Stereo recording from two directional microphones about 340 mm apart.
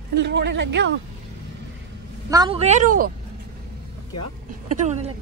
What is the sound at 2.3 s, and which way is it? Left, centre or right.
Speech, centre.